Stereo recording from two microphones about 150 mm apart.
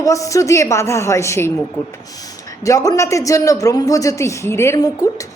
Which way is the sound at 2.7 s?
20° left (ahead or behind).